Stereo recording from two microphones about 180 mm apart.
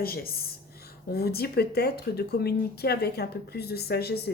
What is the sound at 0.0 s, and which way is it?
A woman's voice, 55° left (ahead or behind).